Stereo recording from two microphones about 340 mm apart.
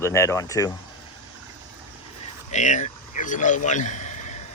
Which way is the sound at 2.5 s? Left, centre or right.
Left.